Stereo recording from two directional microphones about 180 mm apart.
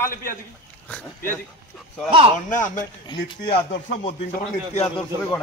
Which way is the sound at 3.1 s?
25° left (ahead or behind).